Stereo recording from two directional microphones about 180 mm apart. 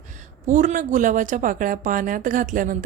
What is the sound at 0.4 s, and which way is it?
A woman's voice, 45° right (ahead or behind).